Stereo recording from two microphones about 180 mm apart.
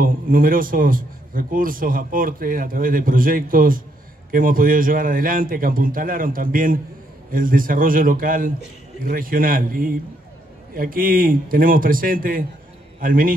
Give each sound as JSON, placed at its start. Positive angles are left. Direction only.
{"t": 0.0, "sound": "a man's voice", "side_deg": -50}